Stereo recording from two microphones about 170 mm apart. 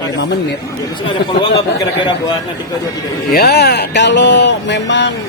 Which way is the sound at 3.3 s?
65° left (ahead or behind).